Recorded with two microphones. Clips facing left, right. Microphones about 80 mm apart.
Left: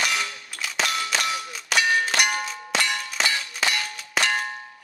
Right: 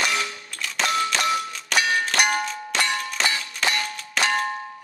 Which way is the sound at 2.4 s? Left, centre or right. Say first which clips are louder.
Right 1 dB; centre.